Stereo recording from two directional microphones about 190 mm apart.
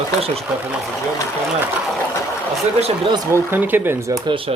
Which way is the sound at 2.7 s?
30° right (ahead or behind).